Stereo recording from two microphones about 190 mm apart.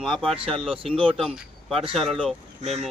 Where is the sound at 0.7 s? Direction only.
30° right (ahead or behind).